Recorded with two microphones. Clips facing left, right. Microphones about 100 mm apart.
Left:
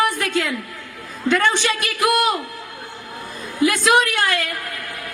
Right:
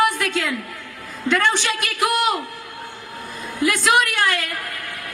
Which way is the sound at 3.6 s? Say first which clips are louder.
Left 2 dB; 15° left (ahead or behind).